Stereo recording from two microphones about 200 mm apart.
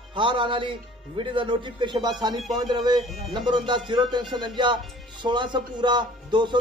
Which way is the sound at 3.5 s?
25° right (ahead or behind).